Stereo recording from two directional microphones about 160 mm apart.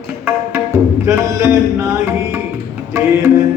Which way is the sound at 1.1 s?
15° right (ahead or behind).